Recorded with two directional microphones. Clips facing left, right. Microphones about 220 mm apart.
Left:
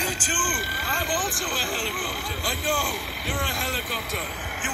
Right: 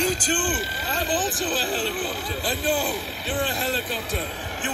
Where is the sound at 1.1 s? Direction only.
35° right (ahead or behind).